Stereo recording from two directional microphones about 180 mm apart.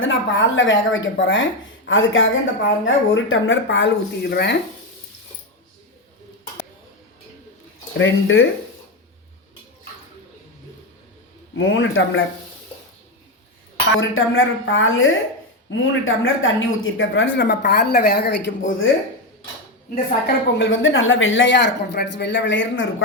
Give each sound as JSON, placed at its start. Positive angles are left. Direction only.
{"t": 0.0, "sound": "speech", "side_deg": 90}
{"t": 7.9, "sound": "speech", "side_deg": 90}
{"t": 11.5, "sound": "speech", "side_deg": 90}
{"t": 13.9, "sound": "speech", "side_deg": 90}
{"t": 20.2, "sound": "speech", "side_deg": 85}